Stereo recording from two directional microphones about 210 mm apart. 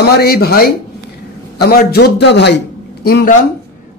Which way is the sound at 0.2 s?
45° left (ahead or behind).